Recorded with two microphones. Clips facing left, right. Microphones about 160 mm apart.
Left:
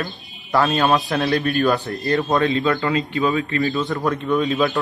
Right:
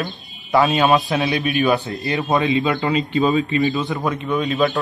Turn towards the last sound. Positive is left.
turn(degrees=0)  # may be behind; listen again after turning